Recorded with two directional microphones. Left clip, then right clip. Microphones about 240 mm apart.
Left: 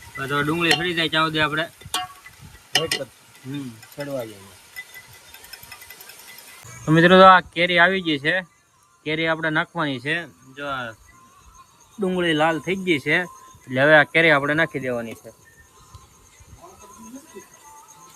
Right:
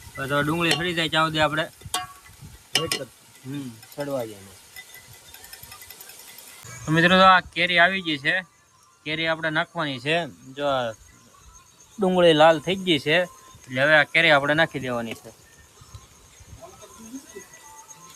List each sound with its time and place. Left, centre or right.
0.1 s a sound: centre
3.4 s speech: centre
5.3 s jackhammer: centre
6.8 s speech: centre
11.9 s speech: centre